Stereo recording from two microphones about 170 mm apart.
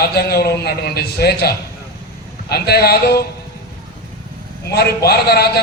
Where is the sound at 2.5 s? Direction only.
70° left (ahead or behind).